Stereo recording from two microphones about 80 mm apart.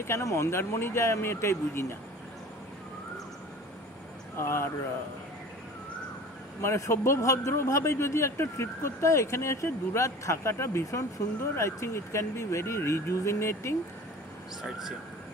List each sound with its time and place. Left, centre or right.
0.0 s a man's voice: left
4.4 s a man's voice: left
6.6 s a man's voice: left
14.6 s speech: centre